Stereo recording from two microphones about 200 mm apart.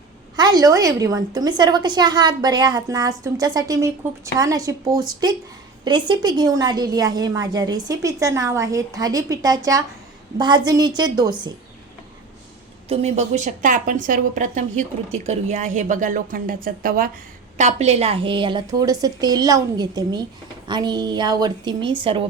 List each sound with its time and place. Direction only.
0.3 s a woman's voice: 20° right (ahead or behind)
12.9 s a woman's voice: 30° right (ahead or behind)